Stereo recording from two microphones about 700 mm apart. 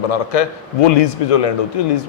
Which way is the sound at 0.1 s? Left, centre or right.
Left.